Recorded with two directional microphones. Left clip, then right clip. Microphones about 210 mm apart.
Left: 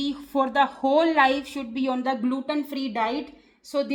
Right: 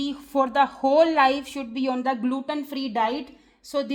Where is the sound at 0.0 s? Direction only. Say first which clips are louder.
Right 1 dB; 30° right (ahead or behind).